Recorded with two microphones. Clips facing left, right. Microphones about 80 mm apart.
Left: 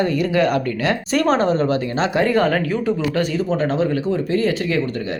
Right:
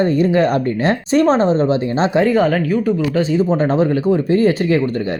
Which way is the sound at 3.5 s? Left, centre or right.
Right.